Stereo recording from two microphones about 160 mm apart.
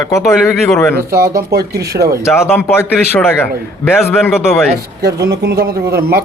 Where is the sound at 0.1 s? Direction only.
15° left (ahead or behind).